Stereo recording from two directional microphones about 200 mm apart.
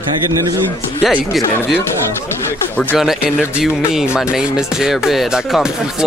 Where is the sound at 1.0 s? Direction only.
Centre (ahead or behind).